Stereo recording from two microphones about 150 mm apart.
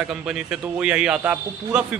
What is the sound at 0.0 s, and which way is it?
Speech, 5° right (ahead or behind).